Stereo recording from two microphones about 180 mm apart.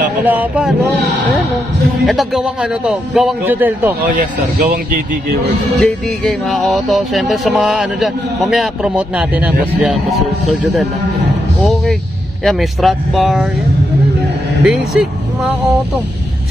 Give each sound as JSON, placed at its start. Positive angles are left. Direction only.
{"t": 0.2, "sound": "speech", "side_deg": -10}
{"t": 2.0, "sound": "music", "side_deg": 0}
{"t": 4.1, "sound": "speech", "side_deg": -50}
{"t": 5.8, "sound": "music", "side_deg": 0}
{"t": 11.6, "sound": "speech", "side_deg": 0}
{"t": 12.4, "sound": "music", "side_deg": 0}
{"t": 14.6, "sound": "speech", "side_deg": 0}